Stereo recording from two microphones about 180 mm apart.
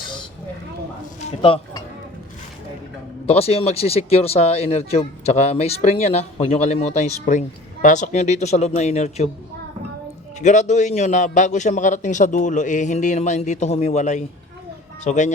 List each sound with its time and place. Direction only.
1.4 s speech: 25° left (ahead or behind)
3.2 s speech: 35° left (ahead or behind)
10.4 s speech: 40° left (ahead or behind)